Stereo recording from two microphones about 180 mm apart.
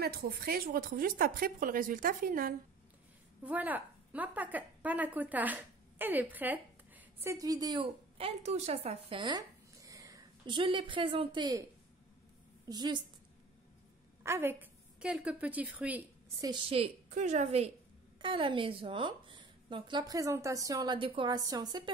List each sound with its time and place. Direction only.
0.0 s speech: 60° right (ahead or behind)
3.4 s a woman's voice: 10° right (ahead or behind)
7.2 s a woman's voice: 20° right (ahead or behind)
12.6 s a woman's voice: 25° right (ahead or behind)
14.2 s a woman's voice: 10° right (ahead or behind)
16.3 s a woman's voice: 25° right (ahead or behind)
18.2 s a woman's voice: 25° right (ahead or behind)